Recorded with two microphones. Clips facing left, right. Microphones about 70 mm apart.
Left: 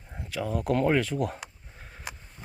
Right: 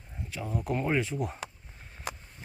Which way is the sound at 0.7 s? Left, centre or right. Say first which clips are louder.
Left 5 dB; left.